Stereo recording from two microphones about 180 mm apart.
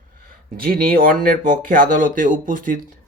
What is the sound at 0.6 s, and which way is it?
Speech, 55° right (ahead or behind).